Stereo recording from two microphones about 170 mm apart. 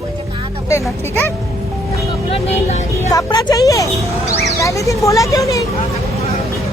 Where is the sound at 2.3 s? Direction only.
40° left (ahead or behind).